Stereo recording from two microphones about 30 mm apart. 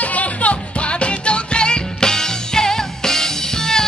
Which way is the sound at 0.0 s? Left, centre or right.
Left.